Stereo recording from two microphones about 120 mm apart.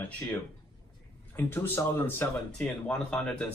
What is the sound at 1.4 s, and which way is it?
Speech, 15° left (ahead or behind).